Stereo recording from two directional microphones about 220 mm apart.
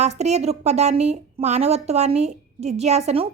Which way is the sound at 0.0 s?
30° right (ahead or behind).